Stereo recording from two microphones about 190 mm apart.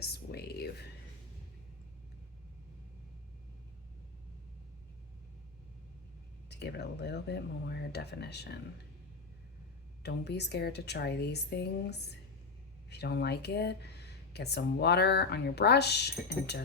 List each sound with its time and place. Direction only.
0.0 s a sound: 55° left (ahead or behind)
6.5 s speech: 60° left (ahead or behind)
10.0 s speech: 60° left (ahead or behind)